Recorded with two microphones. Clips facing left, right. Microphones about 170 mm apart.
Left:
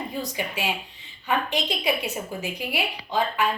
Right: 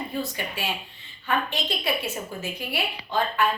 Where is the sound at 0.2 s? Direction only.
15° left (ahead or behind).